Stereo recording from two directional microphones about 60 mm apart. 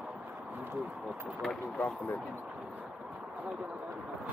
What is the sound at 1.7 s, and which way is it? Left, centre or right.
Speech, left.